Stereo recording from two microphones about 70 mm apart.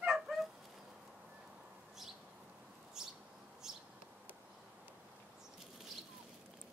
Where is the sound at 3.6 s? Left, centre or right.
Centre.